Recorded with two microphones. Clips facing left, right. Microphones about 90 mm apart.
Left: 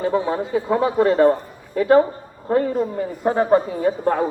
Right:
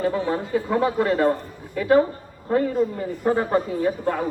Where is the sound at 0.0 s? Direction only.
20° left (ahead or behind).